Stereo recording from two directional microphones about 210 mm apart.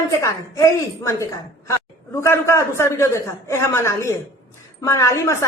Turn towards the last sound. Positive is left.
turn(degrees=15)  # may be behind; listen again after turning